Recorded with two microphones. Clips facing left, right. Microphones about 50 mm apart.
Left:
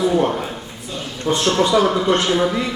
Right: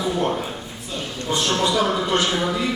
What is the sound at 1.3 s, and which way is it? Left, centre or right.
Speech, left.